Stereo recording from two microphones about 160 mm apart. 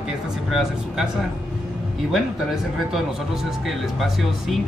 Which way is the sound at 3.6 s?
Centre (ahead or behind).